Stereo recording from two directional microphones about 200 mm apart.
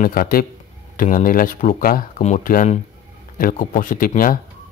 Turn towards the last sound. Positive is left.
turn(degrees=45)  # may be behind; listen again after turning